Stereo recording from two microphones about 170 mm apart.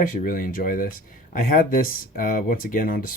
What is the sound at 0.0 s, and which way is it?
Speech, 55° left (ahead or behind).